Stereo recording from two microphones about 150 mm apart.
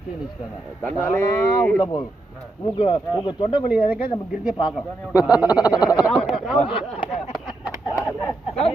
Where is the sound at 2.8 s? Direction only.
35° left (ahead or behind).